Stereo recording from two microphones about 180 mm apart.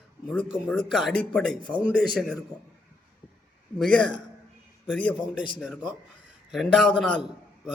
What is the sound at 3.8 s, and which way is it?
A man's voice, 5° left (ahead or behind).